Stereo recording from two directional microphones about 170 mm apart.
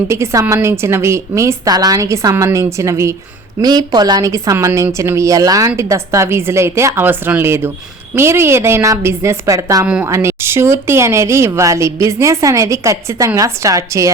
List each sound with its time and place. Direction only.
0.1 s speech: 15° right (ahead or behind)